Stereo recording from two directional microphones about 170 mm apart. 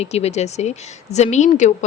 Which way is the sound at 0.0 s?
40° left (ahead or behind).